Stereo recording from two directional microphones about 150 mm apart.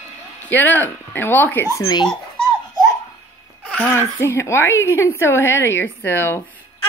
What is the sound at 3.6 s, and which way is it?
Speech, 10° left (ahead or behind).